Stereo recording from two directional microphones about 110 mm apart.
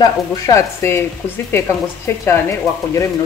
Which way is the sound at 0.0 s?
30° left (ahead or behind).